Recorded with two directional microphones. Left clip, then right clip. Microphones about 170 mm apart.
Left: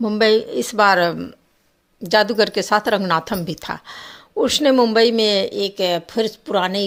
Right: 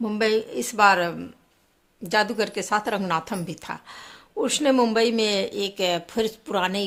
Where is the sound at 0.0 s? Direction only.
30° left (ahead or behind).